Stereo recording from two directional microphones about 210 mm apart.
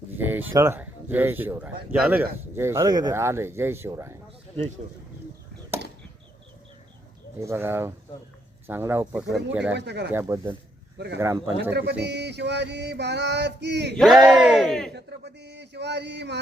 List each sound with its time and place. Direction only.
0.2 s a sound: 10° right (ahead or behind)
0.5 s speech: 10° right (ahead or behind)
7.3 s speech: 10° right (ahead or behind)
9.7 s speech: 55° right (ahead or behind)
10.1 s speech: 15° right (ahead or behind)
10.9 s speech: 55° right (ahead or behind)
11.2 s speech: 10° right (ahead or behind)
12.0 s male singing: 55° right (ahead or behind)
13.9 s speech: centre (ahead or behind)
14.9 s speech: 55° right (ahead or behind)